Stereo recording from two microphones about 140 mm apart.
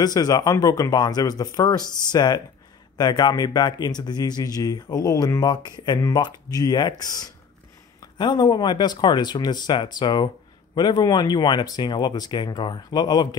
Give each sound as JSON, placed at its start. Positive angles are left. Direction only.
{"t": 0.0, "sound": "speech", "side_deg": 25}